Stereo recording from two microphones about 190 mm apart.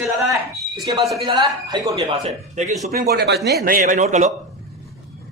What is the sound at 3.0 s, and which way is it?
A man's voice, 60° right (ahead or behind).